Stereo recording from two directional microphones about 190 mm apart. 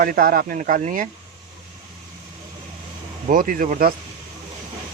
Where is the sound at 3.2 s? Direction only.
45° right (ahead or behind).